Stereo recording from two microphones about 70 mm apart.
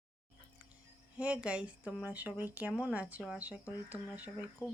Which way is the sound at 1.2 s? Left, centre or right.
Centre.